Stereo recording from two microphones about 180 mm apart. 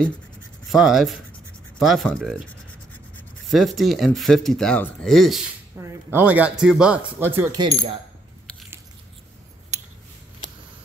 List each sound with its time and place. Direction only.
0.7 s speech: centre (ahead or behind)
3.4 s speech: centre (ahead or behind)
5.8 s speech: 15° right (ahead or behind)
7.5 s speech: 25° right (ahead or behind)